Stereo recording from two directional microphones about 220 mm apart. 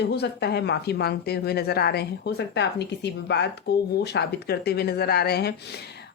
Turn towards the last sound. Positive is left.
turn(degrees=50)  # may be behind; listen again after turning